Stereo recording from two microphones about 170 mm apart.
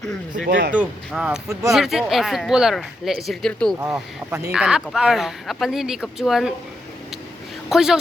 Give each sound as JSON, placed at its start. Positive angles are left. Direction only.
{"t": 0.3, "sound": "speech", "side_deg": -75}
{"t": 0.7, "sound": "speech", "side_deg": -5}
{"t": 3.9, "sound": "speech", "side_deg": -10}
{"t": 7.7, "sound": "speech", "side_deg": -5}